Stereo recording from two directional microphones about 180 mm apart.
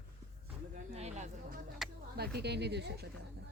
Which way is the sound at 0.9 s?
40° right (ahead or behind).